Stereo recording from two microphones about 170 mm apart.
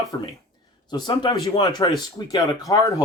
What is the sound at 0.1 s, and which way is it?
Speech, 25° left (ahead or behind).